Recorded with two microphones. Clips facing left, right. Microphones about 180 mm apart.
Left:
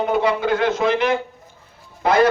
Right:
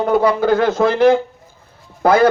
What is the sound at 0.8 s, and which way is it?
Speech, 50° right (ahead or behind).